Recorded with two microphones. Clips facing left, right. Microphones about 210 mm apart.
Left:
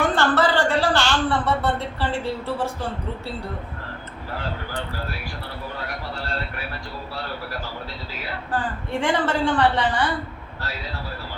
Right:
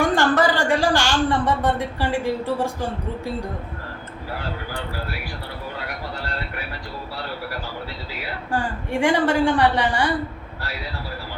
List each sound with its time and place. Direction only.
0.0 s a woman's voice: 15° right (ahead or behind)
8.5 s a woman's voice: 10° right (ahead or behind)